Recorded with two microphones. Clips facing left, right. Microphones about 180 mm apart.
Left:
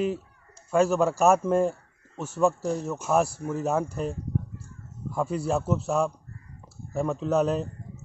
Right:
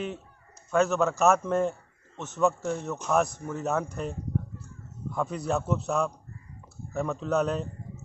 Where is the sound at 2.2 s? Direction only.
30° left (ahead or behind).